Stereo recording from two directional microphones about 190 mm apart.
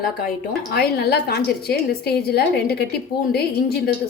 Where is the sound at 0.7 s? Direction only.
55° left (ahead or behind).